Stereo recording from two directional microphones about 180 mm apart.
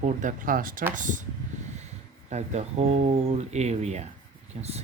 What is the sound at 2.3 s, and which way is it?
Speech, 35° right (ahead or behind).